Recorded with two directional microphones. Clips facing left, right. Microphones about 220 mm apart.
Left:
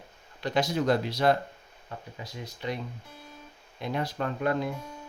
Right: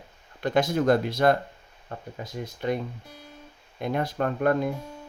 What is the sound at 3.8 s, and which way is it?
Speech, 50° right (ahead or behind).